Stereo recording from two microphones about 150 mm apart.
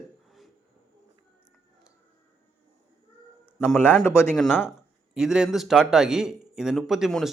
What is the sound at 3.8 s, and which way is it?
Speech, 15° left (ahead or behind).